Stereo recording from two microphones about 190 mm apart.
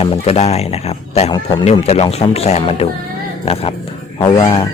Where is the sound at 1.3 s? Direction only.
20° left (ahead or behind).